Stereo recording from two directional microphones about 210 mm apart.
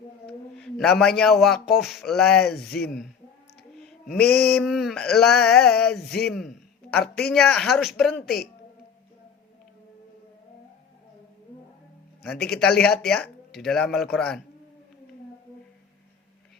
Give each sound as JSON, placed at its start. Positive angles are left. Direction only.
{"t": 0.6, "sound": "a sound", "side_deg": 0}
{"t": 1.2, "sound": "speech", "side_deg": 0}
{"t": 2.6, "sound": "mantra", "side_deg": 50}
{"t": 2.8, "sound": "speech", "side_deg": 0}
{"t": 3.8, "sound": "a sound", "side_deg": 0}
{"t": 4.2, "sound": "mantra", "side_deg": 50}
{"t": 4.5, "sound": "speech", "side_deg": 0}
{"t": 12.3, "sound": "mantra", "side_deg": 50}
{"t": 12.5, "sound": "speech", "side_deg": 5}